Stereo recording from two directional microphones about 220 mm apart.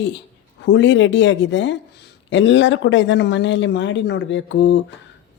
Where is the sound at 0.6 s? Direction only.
55° left (ahead or behind).